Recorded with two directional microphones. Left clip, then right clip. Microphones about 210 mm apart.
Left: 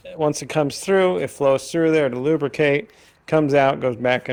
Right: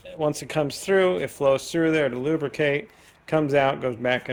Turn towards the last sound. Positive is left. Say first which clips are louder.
# left 4 dB
turn(degrees=35)  # may be behind; listen again after turning